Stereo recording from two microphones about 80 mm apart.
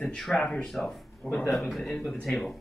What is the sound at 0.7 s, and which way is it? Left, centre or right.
A man's voice, centre.